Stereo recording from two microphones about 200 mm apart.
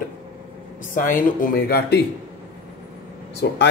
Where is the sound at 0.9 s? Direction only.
45° left (ahead or behind).